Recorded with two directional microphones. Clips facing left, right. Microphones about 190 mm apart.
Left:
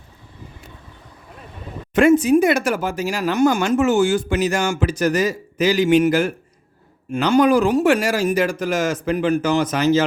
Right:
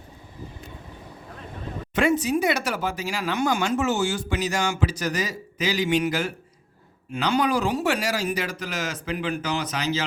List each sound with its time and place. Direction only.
2.0 s speech: 50° left (ahead or behind)